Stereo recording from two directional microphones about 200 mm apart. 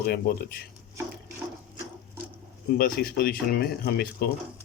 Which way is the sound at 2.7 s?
50° left (ahead or behind).